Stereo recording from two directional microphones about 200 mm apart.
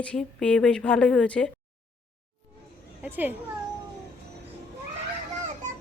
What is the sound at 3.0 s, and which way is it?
Children playing, 10° right (ahead or behind).